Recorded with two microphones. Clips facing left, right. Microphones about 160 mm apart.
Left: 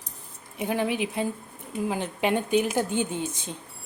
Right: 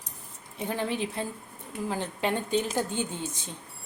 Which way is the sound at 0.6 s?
15° left (ahead or behind).